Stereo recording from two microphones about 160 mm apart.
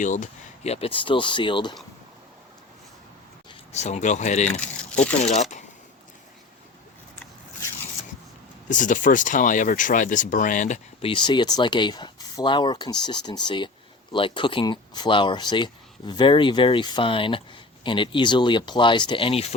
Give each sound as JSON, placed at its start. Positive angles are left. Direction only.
{"t": 0.0, "sound": "speech", "side_deg": 50}
{"t": 3.7, "sound": "speech", "side_deg": 45}
{"t": 8.7, "sound": "speech", "side_deg": 55}
{"t": 11.0, "sound": "speech", "side_deg": 30}